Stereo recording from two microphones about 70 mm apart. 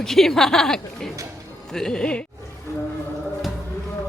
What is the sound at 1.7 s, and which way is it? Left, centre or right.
Music, centre.